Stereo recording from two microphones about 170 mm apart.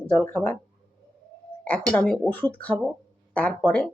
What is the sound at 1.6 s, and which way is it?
A woman's voice, 5° left (ahead or behind).